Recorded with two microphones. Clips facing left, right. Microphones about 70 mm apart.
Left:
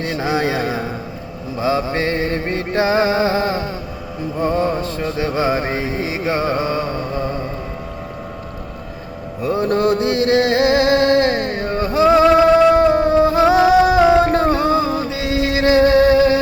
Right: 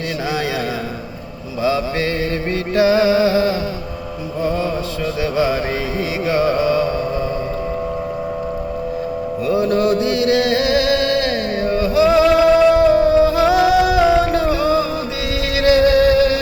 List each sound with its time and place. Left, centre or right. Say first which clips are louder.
0.3 s speech: left 3 dB; left
1.6 s music: even; left
9.4 s music: even; left